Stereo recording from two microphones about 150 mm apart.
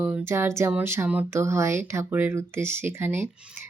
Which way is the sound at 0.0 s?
15° right (ahead or behind).